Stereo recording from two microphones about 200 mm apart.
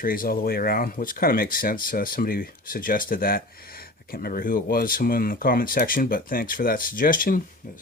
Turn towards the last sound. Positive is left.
turn(degrees=45)  # may be behind; listen again after turning